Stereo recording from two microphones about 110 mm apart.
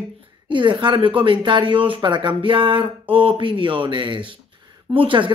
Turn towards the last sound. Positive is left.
turn(degrees=-50)  # may be behind; listen again after turning